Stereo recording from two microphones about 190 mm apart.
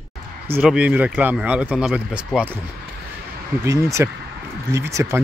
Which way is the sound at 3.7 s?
15° right (ahead or behind).